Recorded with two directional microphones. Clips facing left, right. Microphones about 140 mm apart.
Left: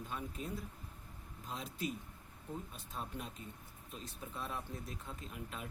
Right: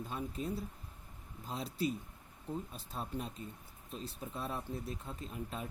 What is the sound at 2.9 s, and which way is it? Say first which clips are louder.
Speech: right 4 dB; 35° right (ahead or behind).